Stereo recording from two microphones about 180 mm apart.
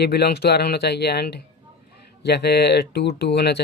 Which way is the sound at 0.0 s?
60° left (ahead or behind).